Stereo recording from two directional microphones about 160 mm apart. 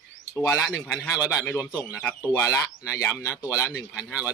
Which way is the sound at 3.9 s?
10° right (ahead or behind).